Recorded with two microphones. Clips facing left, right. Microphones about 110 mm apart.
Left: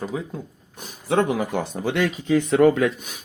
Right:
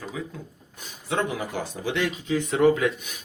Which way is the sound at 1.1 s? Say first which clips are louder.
Left 6 dB; 55° left (ahead or behind).